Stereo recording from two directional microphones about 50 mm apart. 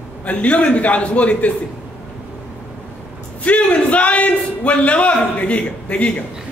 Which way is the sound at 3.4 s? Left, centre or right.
Left.